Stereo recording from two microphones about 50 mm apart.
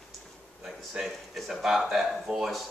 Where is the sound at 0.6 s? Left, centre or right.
Centre.